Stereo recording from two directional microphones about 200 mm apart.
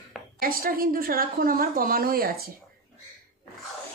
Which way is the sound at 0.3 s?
45° right (ahead or behind).